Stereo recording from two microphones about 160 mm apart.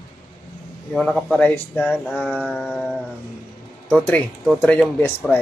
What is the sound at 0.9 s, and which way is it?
Speech, centre (ahead or behind).